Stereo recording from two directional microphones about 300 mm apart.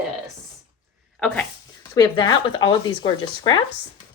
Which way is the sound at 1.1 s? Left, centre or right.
Centre.